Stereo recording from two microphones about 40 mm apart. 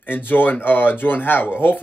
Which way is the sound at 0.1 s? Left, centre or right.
Left.